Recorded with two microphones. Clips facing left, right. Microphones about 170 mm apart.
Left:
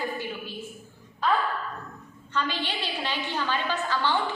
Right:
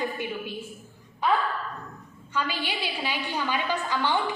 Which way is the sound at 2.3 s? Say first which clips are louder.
Even; 10° right (ahead or behind).